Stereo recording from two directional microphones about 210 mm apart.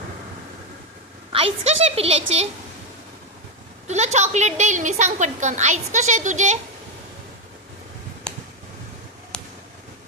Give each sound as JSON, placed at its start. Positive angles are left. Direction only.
{"t": 1.3, "sound": "a woman's voice", "side_deg": -25}
{"t": 3.8, "sound": "a woman's voice", "side_deg": -35}
{"t": 8.3, "sound": "a sound", "side_deg": 5}